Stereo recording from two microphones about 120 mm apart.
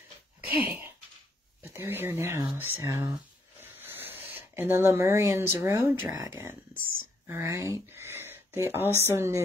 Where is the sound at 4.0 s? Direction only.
15° right (ahead or behind).